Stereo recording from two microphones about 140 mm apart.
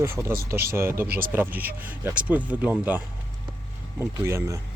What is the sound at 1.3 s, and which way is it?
Speech, 15° right (ahead or behind).